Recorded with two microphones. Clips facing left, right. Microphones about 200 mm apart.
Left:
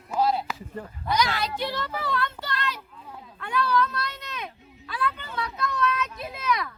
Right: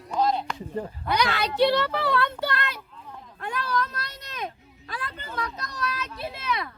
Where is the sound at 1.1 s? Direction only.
60° right (ahead or behind).